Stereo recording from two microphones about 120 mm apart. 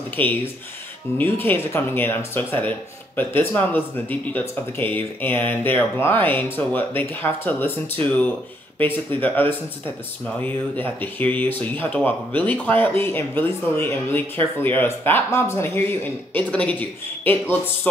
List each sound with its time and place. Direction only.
0.1 s speech: 15° left (ahead or behind)